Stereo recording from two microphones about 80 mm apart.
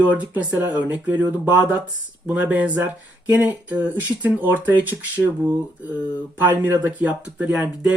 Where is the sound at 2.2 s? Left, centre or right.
Centre.